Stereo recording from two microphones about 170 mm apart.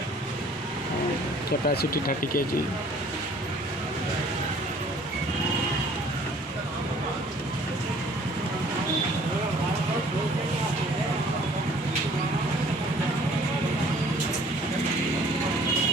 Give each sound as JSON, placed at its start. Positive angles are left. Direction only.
{"t": 1.6, "sound": "speech", "side_deg": 65}